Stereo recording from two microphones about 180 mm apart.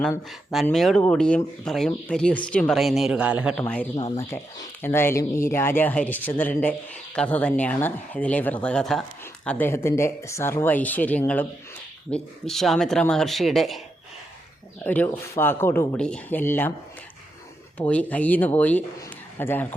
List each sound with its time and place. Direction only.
0.0 s speech: centre (ahead or behind)
3.6 s speech: 10° left (ahead or behind)
14.8 s speech: 10° left (ahead or behind)
17.7 s speech: 5° left (ahead or behind)